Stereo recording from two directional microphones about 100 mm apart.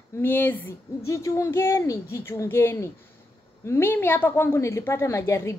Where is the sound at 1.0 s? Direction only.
30° left (ahead or behind).